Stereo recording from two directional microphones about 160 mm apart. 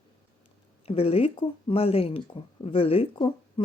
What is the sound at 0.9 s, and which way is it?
Speech, 40° left (ahead or behind).